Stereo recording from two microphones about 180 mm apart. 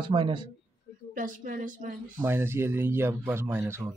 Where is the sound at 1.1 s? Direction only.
45° right (ahead or behind).